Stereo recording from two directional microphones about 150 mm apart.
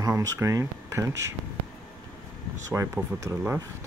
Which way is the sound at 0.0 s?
20° right (ahead or behind).